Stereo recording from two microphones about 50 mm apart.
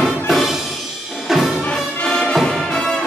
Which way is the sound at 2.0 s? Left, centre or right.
Centre.